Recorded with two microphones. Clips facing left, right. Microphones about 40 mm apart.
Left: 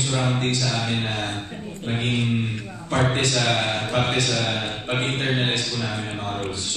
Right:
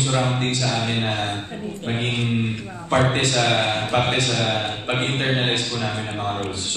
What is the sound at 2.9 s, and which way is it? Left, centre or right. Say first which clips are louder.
A man's voice: right 2 dB; right.